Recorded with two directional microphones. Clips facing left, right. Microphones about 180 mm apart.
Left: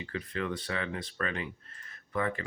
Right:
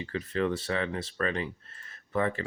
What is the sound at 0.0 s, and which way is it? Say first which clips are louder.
Speech: right 5 dB; 35° right (ahead or behind).